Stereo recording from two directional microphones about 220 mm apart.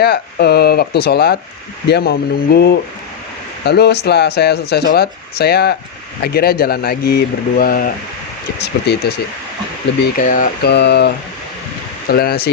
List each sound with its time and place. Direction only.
0.0 s speech: 45° left (ahead or behind)
10.2 s speech: 40° left (ahead or behind)